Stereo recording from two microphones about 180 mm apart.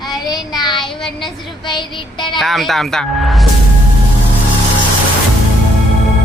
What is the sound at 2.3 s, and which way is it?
Speech, centre (ahead or behind).